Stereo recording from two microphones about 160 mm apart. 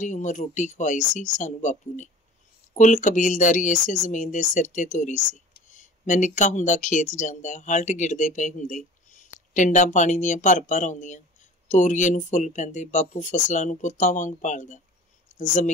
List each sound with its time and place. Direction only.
0.0 s speech: 50° left (ahead or behind)